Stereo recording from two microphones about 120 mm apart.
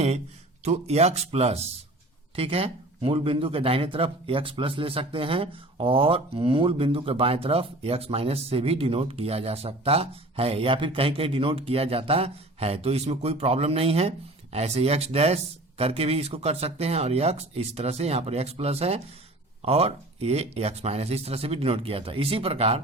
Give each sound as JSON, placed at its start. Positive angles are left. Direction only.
{"t": 0.6, "sound": "speech", "side_deg": -65}